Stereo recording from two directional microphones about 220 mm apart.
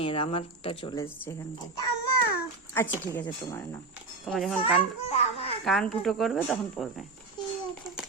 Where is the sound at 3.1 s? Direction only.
10° left (ahead or behind).